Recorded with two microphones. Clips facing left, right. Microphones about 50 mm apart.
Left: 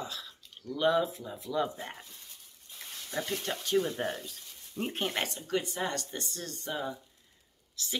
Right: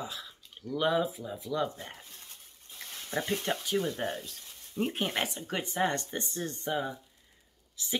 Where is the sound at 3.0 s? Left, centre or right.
Right.